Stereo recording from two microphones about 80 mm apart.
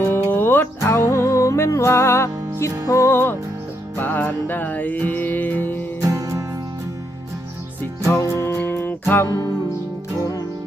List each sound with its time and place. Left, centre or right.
0.1 s music: left
6.0 s music: right
8.1 s music: left